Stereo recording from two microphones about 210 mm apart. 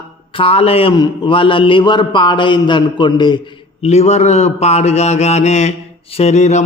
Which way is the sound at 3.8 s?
30° left (ahead or behind).